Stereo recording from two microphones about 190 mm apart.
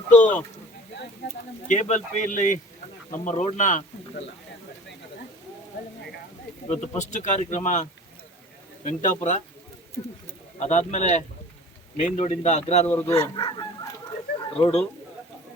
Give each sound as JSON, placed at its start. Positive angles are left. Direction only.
{"t": 0.1, "sound": "speech", "side_deg": 40}
{"t": 1.6, "sound": "speech", "side_deg": 40}
{"t": 6.7, "sound": "speech", "side_deg": 35}
{"t": 10.6, "sound": "speech", "side_deg": 40}
{"t": 12.9, "sound": "speech", "side_deg": 10}
{"t": 13.2, "sound": "chicken", "side_deg": 25}
{"t": 14.3, "sound": "a sound", "side_deg": 30}